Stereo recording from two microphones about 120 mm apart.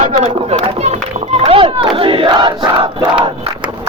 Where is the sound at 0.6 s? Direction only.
65° right (ahead or behind).